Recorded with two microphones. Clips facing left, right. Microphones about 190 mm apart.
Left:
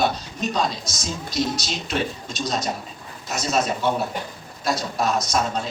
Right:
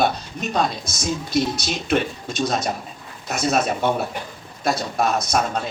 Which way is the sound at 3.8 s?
55° right (ahead or behind).